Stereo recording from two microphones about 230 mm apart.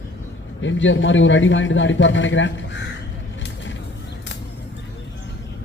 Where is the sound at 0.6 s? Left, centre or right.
Left.